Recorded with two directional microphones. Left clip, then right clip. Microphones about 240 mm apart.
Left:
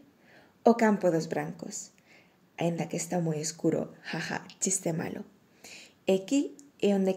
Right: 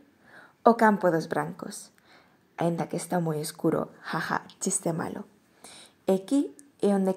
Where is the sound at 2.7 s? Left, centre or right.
Centre.